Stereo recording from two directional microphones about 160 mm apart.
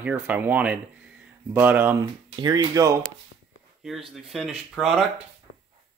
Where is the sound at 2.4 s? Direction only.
25° right (ahead or behind).